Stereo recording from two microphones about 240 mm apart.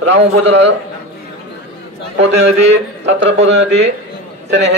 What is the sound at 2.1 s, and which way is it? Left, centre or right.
A man's voice, right.